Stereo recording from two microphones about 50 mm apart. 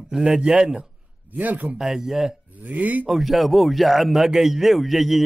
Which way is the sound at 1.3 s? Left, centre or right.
Right.